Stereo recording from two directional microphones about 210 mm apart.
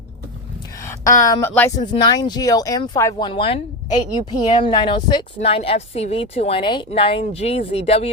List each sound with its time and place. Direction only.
0.9 s a woman's voice: 15° left (ahead or behind)